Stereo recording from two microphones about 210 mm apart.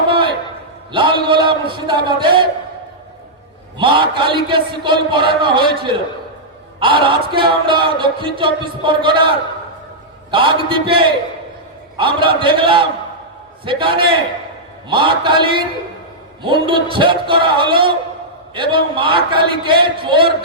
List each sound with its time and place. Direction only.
0.9 s speech: 25° right (ahead or behind)
3.8 s speech: 25° right (ahead or behind)
10.3 s speech: 25° right (ahead or behind)